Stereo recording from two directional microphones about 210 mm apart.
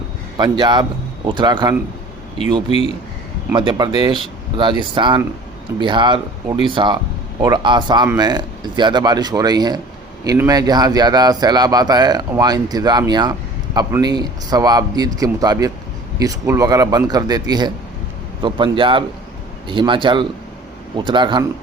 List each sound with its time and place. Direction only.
0.3 s speech: 20° right (ahead or behind)
2.6 s a man's voice: 30° left (ahead or behind)
3.5 s speech: 20° right (ahead or behind)